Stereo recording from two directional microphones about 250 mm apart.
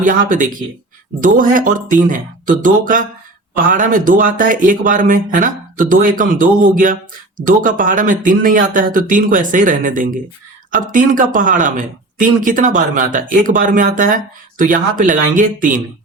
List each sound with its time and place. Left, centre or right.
0.0 s speech: right